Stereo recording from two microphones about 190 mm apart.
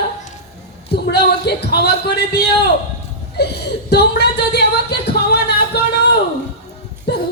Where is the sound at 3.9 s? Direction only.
60° left (ahead or behind).